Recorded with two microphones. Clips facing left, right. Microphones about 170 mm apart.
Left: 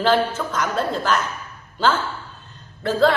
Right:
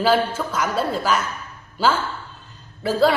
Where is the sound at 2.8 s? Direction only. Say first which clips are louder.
Even; 10° right (ahead or behind).